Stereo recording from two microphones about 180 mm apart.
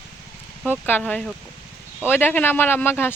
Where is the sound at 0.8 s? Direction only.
10° left (ahead or behind).